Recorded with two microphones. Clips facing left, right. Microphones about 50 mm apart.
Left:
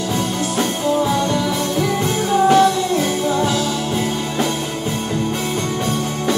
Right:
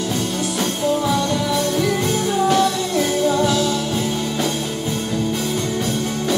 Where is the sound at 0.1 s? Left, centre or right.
Left.